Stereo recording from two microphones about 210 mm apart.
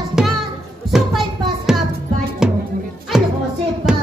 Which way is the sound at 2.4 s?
5° right (ahead or behind).